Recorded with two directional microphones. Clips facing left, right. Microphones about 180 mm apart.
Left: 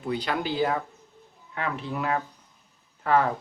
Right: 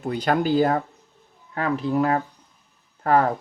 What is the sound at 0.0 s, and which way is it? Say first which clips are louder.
Speech: right 6 dB; 45° right (ahead or behind).